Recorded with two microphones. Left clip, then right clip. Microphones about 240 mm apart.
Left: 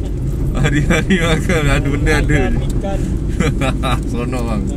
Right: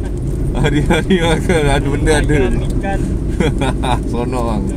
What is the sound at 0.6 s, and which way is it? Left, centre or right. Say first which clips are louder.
Speech: right 1 dB; left.